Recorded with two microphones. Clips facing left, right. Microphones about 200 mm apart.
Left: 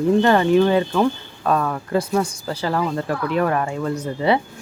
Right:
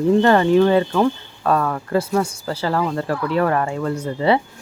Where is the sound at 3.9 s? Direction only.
10° right (ahead or behind).